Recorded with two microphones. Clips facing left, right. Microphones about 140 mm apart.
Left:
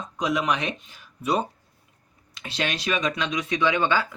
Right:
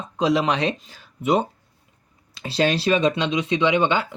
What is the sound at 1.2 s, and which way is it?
Speech, 25° right (ahead or behind).